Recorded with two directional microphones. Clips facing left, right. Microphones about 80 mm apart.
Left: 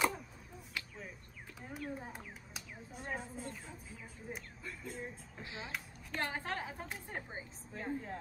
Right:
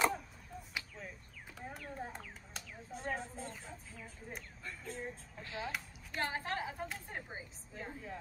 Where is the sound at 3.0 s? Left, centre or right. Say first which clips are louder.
Right 2 dB; centre.